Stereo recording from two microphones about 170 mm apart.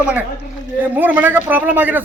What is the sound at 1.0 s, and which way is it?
Speech, 10° right (ahead or behind).